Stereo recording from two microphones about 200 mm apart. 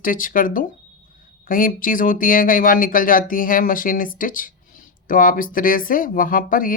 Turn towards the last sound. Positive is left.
turn(degrees=45)  # may be behind; listen again after turning